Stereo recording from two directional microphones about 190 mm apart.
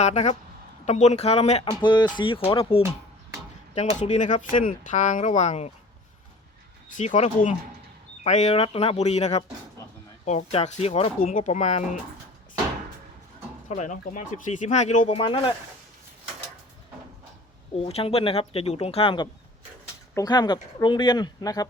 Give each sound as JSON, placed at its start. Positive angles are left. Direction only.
{"t": 0.0, "sound": "speech", "side_deg": 35}
{"t": 4.0, "sound": "speech", "side_deg": 40}
{"t": 6.9, "sound": "speech", "side_deg": 40}
{"t": 13.7, "sound": "speech", "side_deg": 40}
{"t": 17.7, "sound": "speech", "side_deg": 30}